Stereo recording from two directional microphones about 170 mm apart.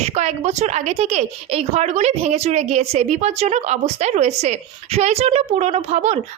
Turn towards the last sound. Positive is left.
turn(degrees=-40)  # may be behind; listen again after turning